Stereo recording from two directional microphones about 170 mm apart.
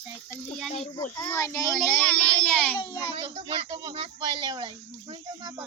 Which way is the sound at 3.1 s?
30° right (ahead or behind).